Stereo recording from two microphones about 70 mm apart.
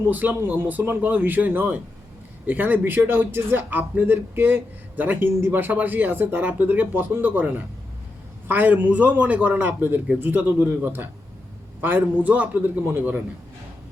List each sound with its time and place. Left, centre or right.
0.1 s a man's voice: right
12.9 s a man's voice: right